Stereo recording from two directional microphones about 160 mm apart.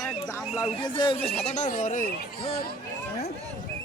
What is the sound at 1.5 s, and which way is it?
Speech, 50° left (ahead or behind).